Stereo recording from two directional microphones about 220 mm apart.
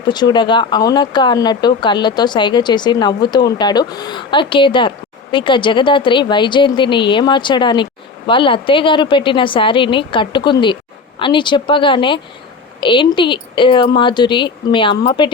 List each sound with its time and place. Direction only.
0.1 s speech: 20° left (ahead or behind)